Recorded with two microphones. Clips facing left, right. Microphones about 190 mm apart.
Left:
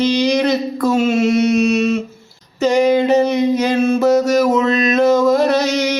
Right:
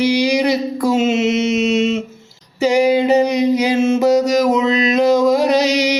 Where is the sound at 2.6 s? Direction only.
10° right (ahead or behind).